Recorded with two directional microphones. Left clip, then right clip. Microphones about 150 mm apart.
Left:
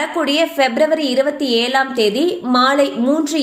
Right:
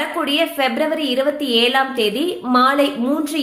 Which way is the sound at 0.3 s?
30° left (ahead or behind).